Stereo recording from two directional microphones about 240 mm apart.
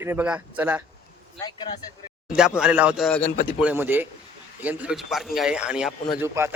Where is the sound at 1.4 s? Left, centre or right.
Centre.